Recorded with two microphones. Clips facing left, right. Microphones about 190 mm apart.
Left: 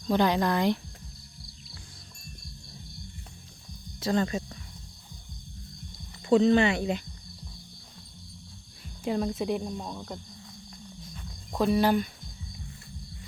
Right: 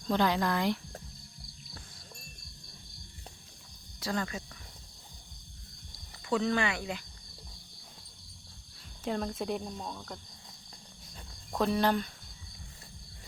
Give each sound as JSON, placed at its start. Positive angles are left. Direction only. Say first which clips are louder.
{"t": 0.1, "sound": "speech", "louder": "left 4 dB", "side_deg": 20}
{"t": 4.0, "sound": "speech", "louder": "left 7 dB", "side_deg": 25}
{"t": 6.2, "sound": "speech", "louder": "left 9 dB", "side_deg": 25}
{"t": 9.0, "sound": "speech", "louder": "left 5 dB", "side_deg": 5}
{"t": 11.5, "sound": "speech", "louder": "left 4 dB", "side_deg": 5}